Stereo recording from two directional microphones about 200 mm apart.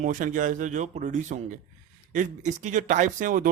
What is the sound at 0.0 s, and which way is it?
Speech, 40° right (ahead or behind).